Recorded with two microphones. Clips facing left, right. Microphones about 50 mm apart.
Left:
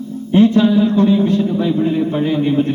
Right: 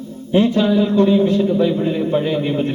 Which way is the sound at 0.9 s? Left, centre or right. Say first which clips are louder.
Left 1 dB; centre.